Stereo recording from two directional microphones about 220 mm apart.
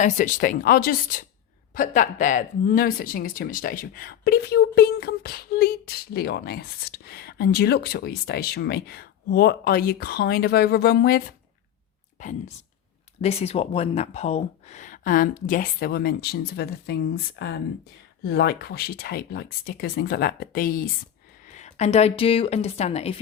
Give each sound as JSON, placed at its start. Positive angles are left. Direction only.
{"t": 0.0, "sound": "speech", "side_deg": 35}
{"t": 12.2, "sound": "speech", "side_deg": 35}